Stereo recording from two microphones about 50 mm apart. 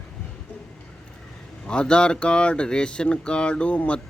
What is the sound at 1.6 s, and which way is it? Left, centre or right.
Speech, centre.